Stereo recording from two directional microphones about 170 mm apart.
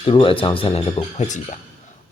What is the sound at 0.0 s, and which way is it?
Speech, 30° left (ahead or behind).